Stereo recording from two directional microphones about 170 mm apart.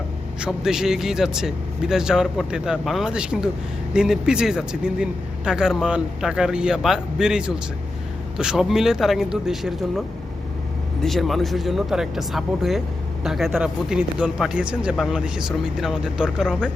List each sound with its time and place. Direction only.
0.3 s speech: 5° right (ahead or behind)
11.0 s speech: centre (ahead or behind)